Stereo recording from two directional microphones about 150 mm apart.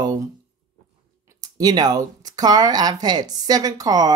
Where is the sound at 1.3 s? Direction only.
25° right (ahead or behind).